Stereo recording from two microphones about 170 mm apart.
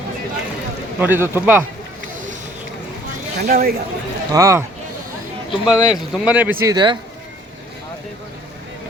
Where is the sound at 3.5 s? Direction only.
60° right (ahead or behind).